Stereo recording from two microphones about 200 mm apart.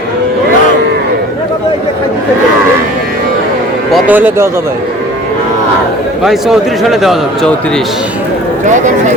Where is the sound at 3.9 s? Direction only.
10° right (ahead or behind).